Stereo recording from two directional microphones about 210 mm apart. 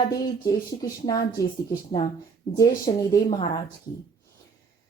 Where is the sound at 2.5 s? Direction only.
20° left (ahead or behind).